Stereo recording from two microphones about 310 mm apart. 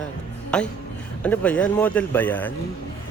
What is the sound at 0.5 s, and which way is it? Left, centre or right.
Speech, centre.